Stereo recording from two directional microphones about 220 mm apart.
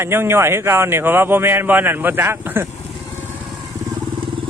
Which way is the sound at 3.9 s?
20° right (ahead or behind).